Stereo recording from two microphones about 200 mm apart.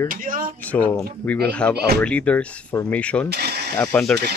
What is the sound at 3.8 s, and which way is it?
Speech, 5° left (ahead or behind).